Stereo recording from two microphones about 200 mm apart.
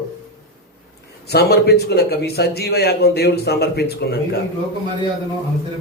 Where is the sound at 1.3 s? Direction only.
55° left (ahead or behind).